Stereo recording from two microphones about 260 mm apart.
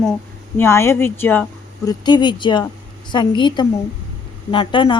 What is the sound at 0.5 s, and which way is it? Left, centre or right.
Speech, centre.